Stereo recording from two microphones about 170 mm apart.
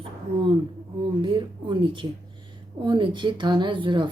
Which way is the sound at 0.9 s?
30° right (ahead or behind).